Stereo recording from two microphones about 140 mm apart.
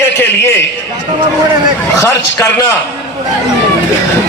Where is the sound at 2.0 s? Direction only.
20° left (ahead or behind).